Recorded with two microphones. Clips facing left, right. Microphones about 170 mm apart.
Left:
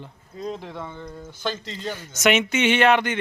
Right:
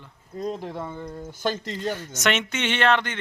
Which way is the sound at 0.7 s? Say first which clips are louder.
Right 2 dB; 10° right (ahead or behind).